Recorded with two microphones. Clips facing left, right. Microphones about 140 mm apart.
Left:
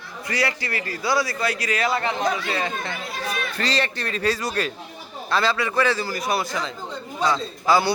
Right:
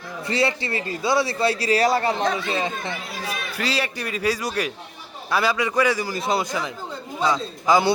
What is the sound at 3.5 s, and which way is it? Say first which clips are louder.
A man's voice: right 1 dB; 10° right (ahead or behind).